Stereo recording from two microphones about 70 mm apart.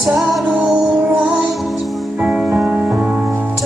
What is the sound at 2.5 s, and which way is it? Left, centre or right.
Music, centre.